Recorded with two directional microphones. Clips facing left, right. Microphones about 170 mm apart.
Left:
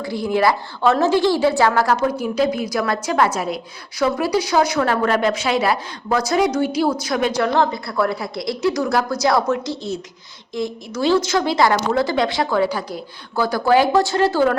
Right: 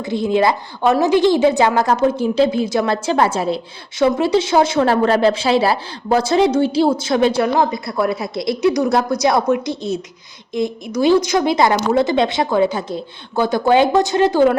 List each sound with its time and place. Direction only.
0.0 s a woman's voice: 20° right (ahead or behind)
7.4 s a woman's voice: 15° right (ahead or behind)